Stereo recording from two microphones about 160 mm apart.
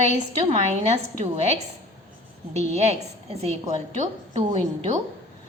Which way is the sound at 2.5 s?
45° right (ahead or behind).